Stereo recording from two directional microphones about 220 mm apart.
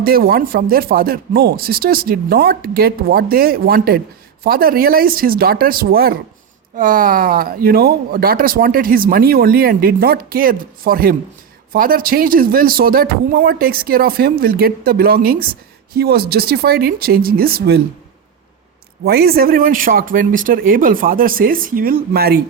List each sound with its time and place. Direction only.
0.0 s speech: 45° right (ahead or behind)
19.0 s speech: 45° right (ahead or behind)